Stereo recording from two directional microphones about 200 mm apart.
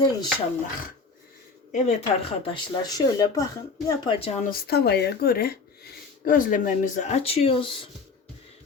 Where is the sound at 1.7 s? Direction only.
30° left (ahead or behind).